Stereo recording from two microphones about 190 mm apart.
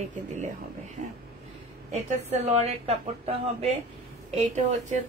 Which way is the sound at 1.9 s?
35° right (ahead or behind).